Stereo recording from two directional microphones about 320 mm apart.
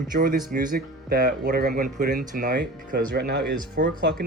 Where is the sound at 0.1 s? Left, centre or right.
Right.